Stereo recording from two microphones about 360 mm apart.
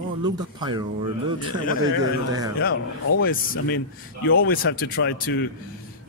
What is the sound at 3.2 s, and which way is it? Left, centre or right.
Speech, left.